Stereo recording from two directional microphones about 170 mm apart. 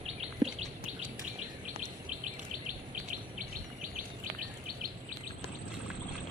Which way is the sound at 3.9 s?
55° right (ahead or behind).